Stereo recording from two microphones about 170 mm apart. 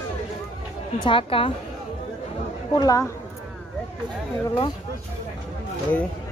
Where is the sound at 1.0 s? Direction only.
30° left (ahead or behind).